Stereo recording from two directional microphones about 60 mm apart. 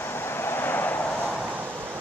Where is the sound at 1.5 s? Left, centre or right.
Right.